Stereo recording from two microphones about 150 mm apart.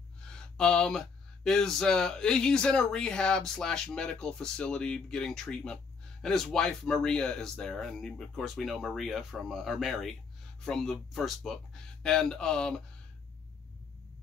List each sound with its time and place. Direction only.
0.3 s speech: 5° left (ahead or behind)